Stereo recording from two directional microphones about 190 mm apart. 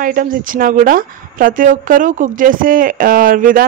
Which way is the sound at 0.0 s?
45° right (ahead or behind).